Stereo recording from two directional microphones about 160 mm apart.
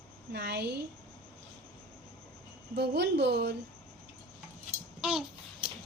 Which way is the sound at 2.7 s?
90° right.